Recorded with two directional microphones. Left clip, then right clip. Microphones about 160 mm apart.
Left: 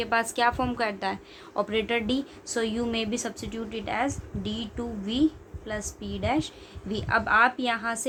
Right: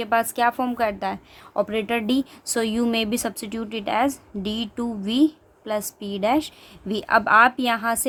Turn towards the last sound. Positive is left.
turn(degrees=-60)  # may be behind; listen again after turning